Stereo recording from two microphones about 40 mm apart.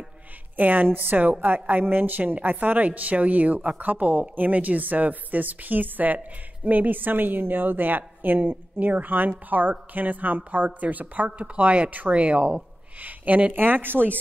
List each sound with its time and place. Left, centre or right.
0.6 s a woman's voice: right
13.0 s speech: right
13.5 s speech: right